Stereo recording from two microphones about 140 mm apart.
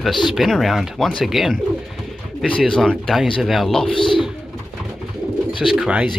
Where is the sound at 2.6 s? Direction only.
5° left (ahead or behind).